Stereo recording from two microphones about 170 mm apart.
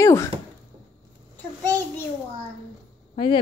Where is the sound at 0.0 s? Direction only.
20° left (ahead or behind).